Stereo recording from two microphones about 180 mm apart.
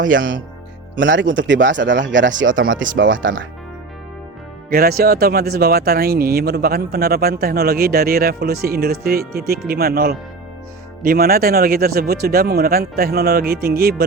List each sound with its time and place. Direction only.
0.2 s speech: 90° right
2.4 s speech: 50° right (ahead or behind)
4.7 s speech: 55° right (ahead or behind)